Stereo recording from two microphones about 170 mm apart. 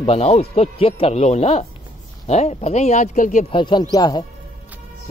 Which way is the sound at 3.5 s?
30° left (ahead or behind).